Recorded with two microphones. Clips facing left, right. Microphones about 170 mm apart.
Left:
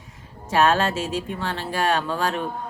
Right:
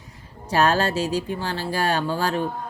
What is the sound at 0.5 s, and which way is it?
A woman's voice, 35° right (ahead or behind).